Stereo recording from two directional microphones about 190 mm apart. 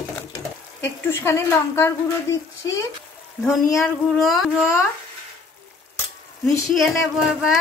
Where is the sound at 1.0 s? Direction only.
10° left (ahead or behind).